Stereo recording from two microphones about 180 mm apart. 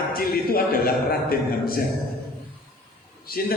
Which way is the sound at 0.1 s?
55° left (ahead or behind).